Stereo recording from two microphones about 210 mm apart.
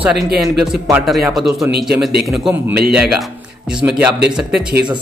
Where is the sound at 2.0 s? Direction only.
Centre (ahead or behind).